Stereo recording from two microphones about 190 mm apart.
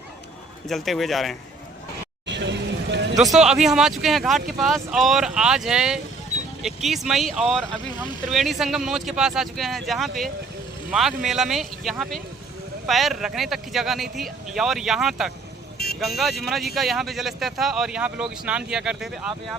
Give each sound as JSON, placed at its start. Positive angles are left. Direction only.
{"t": 0.7, "sound": "speech", "side_deg": 0}
{"t": 2.2, "sound": "vehicle", "side_deg": -65}
{"t": 3.2, "sound": "speech", "side_deg": 0}